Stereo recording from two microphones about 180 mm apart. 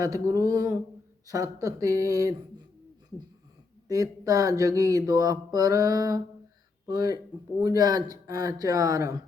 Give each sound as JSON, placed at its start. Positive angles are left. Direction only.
{"t": 0.0, "sound": "speech", "side_deg": -20}
{"t": 3.8, "sound": "speech", "side_deg": -20}